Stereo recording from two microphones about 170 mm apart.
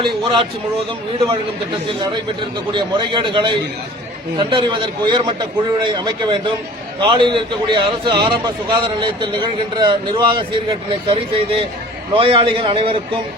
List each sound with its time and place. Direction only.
2.7 s a man's voice: 30° right (ahead or behind)